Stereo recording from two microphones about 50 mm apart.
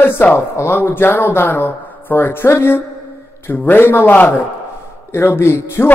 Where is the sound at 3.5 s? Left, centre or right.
Left.